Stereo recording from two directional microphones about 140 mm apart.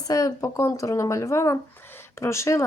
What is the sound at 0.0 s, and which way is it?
Speech, 25° left (ahead or behind).